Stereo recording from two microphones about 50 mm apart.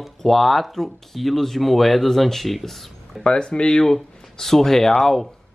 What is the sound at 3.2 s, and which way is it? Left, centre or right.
Speech, centre.